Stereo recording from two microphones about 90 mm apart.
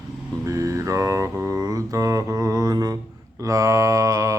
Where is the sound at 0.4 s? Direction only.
35° right (ahead or behind).